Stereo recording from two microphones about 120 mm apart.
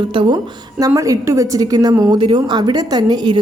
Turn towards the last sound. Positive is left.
turn(degrees=-40)  # may be behind; listen again after turning